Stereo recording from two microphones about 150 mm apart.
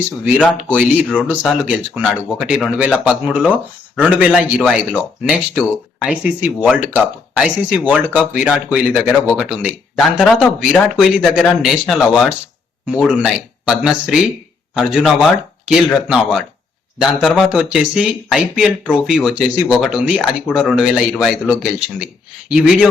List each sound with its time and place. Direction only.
0.4 s speech: 10° right (ahead or behind)